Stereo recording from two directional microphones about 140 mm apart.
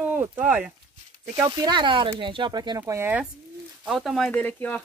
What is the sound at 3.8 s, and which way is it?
Speech, centre (ahead or behind).